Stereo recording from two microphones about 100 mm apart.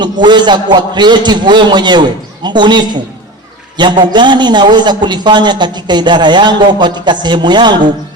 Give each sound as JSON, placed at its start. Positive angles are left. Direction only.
{"t": 0.0, "sound": "a man's voice", "side_deg": -50}